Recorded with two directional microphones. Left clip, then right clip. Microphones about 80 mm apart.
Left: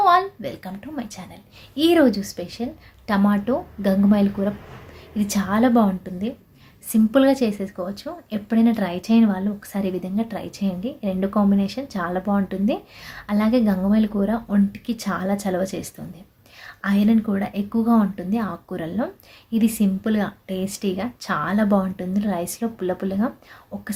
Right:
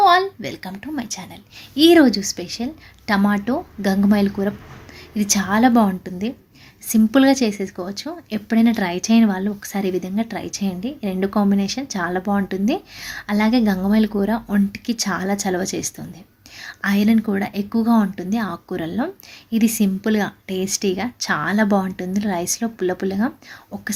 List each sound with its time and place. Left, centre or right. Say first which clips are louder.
0.0 s a woman's voice: right 2 dB; right